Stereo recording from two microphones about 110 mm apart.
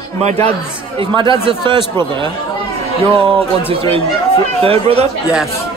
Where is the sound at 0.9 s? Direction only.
50° right (ahead or behind).